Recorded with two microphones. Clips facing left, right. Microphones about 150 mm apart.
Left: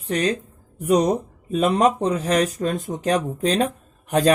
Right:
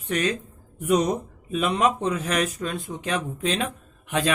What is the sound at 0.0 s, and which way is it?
Speech, 35° left (ahead or behind).